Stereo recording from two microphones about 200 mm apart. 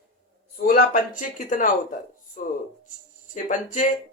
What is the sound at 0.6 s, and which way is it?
Speech, 40° left (ahead or behind).